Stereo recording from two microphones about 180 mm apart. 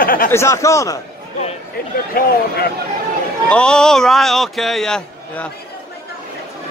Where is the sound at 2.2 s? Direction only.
55° left (ahead or behind).